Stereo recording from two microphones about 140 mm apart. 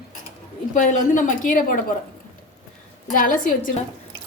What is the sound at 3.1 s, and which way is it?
Speech, 75° left (ahead or behind).